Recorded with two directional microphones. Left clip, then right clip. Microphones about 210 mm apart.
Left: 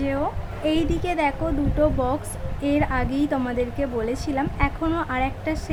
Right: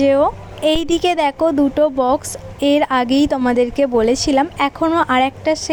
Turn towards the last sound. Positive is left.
turn(degrees=-35)  # may be behind; listen again after turning